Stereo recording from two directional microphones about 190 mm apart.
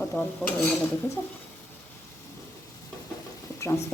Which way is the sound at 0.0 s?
15° left (ahead or behind).